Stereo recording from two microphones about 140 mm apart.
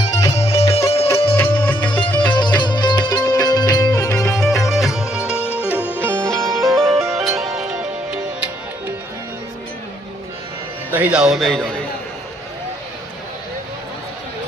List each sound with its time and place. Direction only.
0.2 s music: 25° left (ahead or behind)
2.3 s music: 35° left (ahead or behind)
4.4 s music: centre (ahead or behind)
5.4 s music: 15° left (ahead or behind)
5.6 s music: 10° right (ahead or behind)
6.2 s music: 5° left (ahead or behind)
6.9 s music: 20° right (ahead or behind)
7.2 s music: centre (ahead or behind)
10.9 s a man's voice: 10° right (ahead or behind)